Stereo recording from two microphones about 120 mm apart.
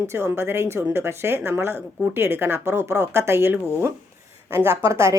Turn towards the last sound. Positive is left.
turn(degrees=-25)  # may be behind; listen again after turning